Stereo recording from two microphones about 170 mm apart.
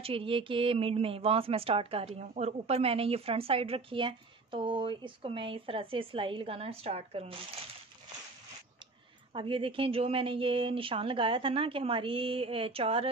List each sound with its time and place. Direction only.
0.0 s a woman's voice: 30° right (ahead or behind)
9.3 s a woman's voice: 30° right (ahead or behind)